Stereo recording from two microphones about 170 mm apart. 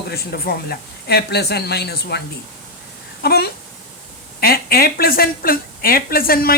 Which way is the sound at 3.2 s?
70° left (ahead or behind).